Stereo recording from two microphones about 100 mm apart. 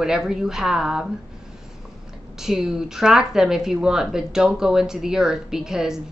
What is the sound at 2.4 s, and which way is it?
Speech, 5° right (ahead or behind).